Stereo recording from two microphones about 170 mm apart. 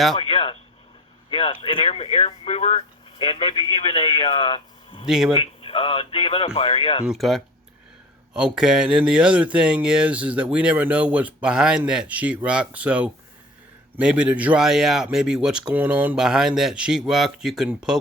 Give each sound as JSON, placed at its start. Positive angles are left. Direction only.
{"t": 0.2, "sound": "a sound", "side_deg": 30}
{"t": 1.3, "sound": "speech", "side_deg": 30}
{"t": 5.0, "sound": "speech", "side_deg": -5}
{"t": 5.3, "sound": "speech", "side_deg": 30}
{"t": 7.0, "sound": "speech", "side_deg": 0}